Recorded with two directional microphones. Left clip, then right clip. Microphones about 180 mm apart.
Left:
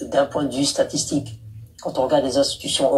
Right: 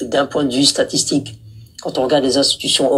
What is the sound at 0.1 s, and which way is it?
Speech, 30° right (ahead or behind).